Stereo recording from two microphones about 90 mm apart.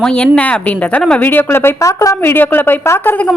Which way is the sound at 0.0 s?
15° left (ahead or behind).